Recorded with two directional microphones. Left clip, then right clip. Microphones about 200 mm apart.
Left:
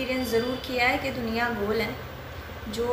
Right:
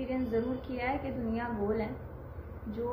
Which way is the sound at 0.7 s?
Centre (ahead or behind).